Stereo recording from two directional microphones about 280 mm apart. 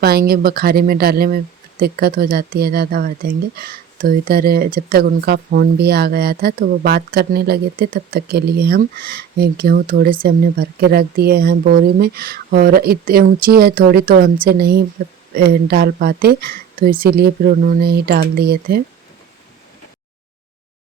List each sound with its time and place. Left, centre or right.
0.0 s speech: right